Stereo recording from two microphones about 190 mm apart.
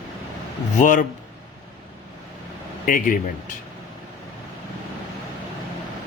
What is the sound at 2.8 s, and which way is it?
Speech, 45° left (ahead or behind).